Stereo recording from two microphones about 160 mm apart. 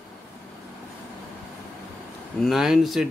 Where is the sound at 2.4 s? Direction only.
Centre (ahead or behind).